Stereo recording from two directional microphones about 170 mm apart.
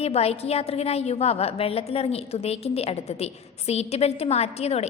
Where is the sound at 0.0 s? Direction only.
35° left (ahead or behind).